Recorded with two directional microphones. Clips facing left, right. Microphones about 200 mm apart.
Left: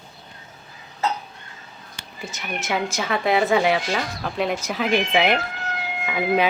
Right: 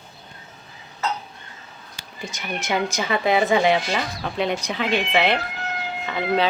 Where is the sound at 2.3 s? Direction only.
5° left (ahead or behind).